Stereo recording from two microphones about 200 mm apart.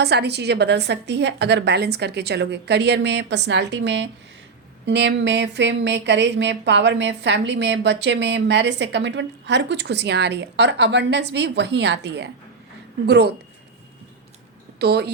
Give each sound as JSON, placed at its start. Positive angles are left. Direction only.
{"t": 0.0, "sound": "speech", "side_deg": -55}
{"t": 14.8, "sound": "speech", "side_deg": -55}